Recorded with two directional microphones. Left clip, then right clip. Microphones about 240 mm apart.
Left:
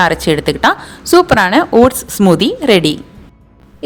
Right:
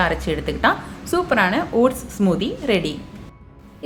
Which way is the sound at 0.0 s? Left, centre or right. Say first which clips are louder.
Left 9 dB; left.